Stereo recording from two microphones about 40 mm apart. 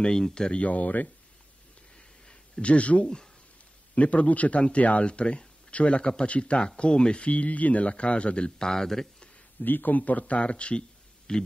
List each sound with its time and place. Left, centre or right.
0.0 s a man's voice: centre
0.6 s speech: left
2.0 s a sound: left
3.9 s a man's voice: left
8.5 s speech: centre
9.6 s a man's voice: left; by 11.4 s centre